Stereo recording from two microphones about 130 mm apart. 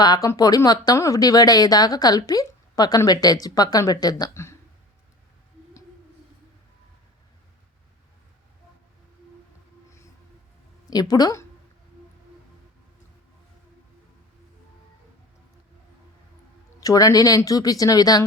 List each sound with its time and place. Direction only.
0.0 s a woman's voice: 30° left (ahead or behind)
10.8 s speech: 30° left (ahead or behind)
16.8 s a woman's voice: 25° left (ahead or behind)